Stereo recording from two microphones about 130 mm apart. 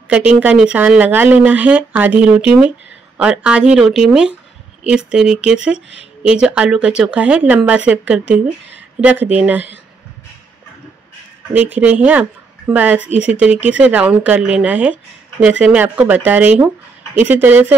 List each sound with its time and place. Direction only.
0.1 s speech: 10° right (ahead or behind)
11.5 s speech: 10° right (ahead or behind)